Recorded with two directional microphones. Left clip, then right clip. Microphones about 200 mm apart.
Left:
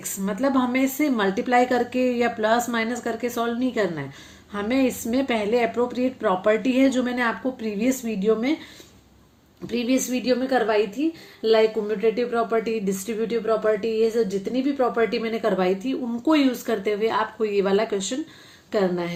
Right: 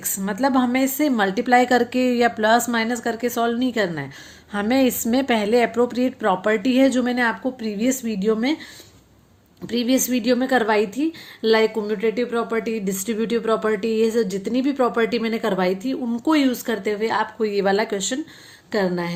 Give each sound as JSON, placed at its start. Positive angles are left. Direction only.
{"t": 0.0, "sound": "a woman's voice", "side_deg": -30}
{"t": 9.6, "sound": "speech", "side_deg": -30}